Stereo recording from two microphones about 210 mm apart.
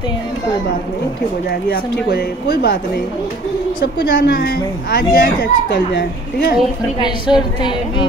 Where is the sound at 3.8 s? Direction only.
45° left (ahead or behind).